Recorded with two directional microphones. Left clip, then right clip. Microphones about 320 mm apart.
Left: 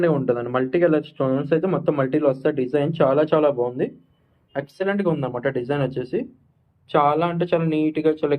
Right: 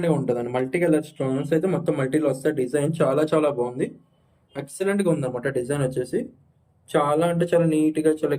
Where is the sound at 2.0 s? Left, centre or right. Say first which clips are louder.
Left 2 dB; left.